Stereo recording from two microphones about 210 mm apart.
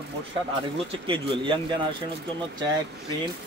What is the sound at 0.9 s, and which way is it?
Speech, 25° right (ahead or behind).